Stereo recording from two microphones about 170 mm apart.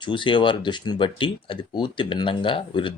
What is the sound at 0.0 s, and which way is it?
Speech, 30° left (ahead or behind).